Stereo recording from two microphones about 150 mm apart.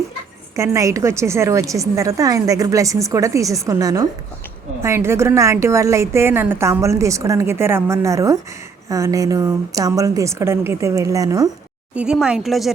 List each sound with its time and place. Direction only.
0.5 s a woman's voice: 20° right (ahead or behind)
11.9 s speech: 5° right (ahead or behind)